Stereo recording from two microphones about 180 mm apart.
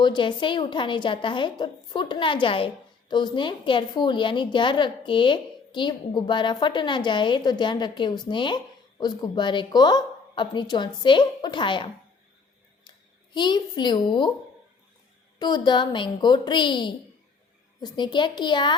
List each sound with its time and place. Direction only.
0.0 s a woman's voice: 25° left (ahead or behind)
13.3 s a woman's voice: 25° left (ahead or behind)
15.4 s a woman's voice: 25° left (ahead or behind)